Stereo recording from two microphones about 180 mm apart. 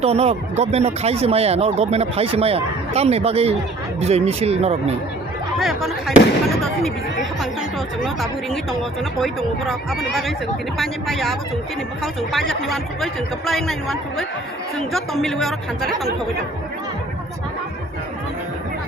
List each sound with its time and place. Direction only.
0.0 s speech: 35° right (ahead or behind)
5.5 s a man's voice: centre (ahead or behind)